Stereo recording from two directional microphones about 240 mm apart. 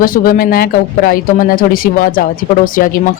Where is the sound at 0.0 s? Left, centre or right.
Left.